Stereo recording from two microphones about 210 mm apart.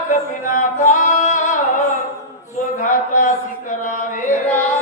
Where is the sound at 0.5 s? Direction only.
35° left (ahead or behind).